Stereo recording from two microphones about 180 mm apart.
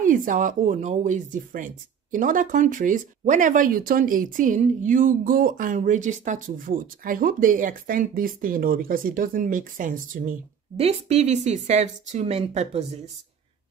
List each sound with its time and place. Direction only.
0.0 s speech: 45° right (ahead or behind)
10.8 s speech: 35° right (ahead or behind)